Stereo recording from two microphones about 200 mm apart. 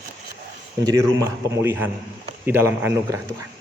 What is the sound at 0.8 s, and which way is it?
A man's voice, 15° right (ahead or behind).